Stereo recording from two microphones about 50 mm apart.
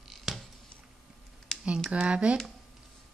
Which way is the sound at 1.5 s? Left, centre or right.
Centre.